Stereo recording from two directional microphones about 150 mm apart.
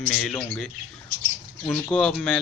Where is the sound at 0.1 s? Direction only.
5° left (ahead or behind).